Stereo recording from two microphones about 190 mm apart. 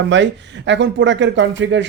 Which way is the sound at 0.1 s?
70° right (ahead or behind).